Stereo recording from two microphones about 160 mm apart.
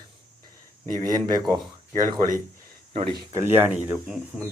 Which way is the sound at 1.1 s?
25° right (ahead or behind).